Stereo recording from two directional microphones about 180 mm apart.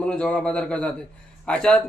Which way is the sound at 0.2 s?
5° left (ahead or behind).